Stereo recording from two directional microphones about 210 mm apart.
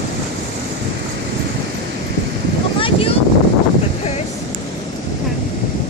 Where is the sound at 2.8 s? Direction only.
25° left (ahead or behind).